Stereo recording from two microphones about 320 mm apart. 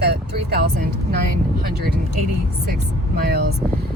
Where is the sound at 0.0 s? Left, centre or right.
Right.